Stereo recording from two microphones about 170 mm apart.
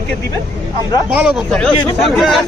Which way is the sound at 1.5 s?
5° left (ahead or behind).